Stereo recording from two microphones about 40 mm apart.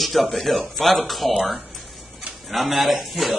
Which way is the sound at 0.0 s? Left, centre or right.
Centre.